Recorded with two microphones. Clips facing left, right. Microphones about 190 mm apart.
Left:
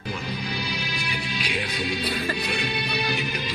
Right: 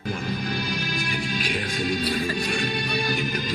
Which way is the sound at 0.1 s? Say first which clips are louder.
Right 3 dB; 45° right (ahead or behind).